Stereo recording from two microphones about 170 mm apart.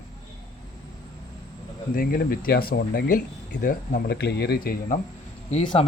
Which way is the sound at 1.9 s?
55° left (ahead or behind).